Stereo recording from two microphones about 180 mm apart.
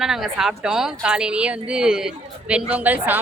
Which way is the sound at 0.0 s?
Centre (ahead or behind).